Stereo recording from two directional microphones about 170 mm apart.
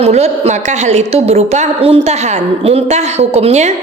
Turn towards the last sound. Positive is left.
turn(degrees=-40)  # may be behind; listen again after turning